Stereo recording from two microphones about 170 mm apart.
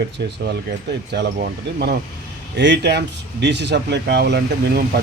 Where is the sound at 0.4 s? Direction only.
85° right.